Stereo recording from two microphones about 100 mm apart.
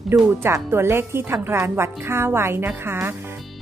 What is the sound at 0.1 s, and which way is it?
A woman's voice, 25° right (ahead or behind).